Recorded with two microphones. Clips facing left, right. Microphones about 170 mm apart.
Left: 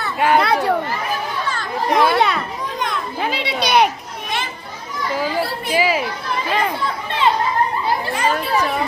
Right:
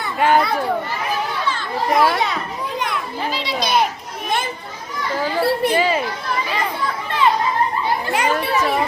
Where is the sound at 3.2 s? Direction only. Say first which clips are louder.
Left 2 dB; 60° left (ahead or behind).